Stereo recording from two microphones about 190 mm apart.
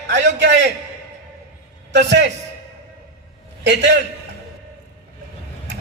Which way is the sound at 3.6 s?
65° right (ahead or behind).